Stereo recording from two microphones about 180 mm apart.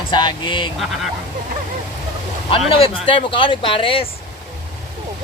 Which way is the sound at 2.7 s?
30° left (ahead or behind).